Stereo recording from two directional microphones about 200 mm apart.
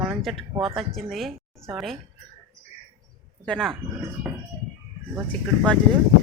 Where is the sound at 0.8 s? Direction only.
Centre (ahead or behind).